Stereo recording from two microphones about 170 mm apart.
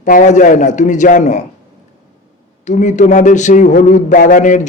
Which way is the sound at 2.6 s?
45° left (ahead or behind).